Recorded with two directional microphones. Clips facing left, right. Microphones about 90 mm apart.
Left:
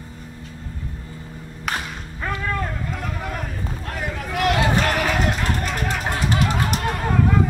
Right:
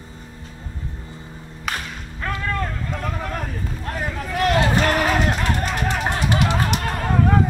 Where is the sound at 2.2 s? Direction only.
5° left (ahead or behind).